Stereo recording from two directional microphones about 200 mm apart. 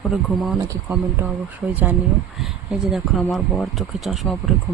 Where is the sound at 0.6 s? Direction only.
15° right (ahead or behind); by 4.3 s centre (ahead or behind).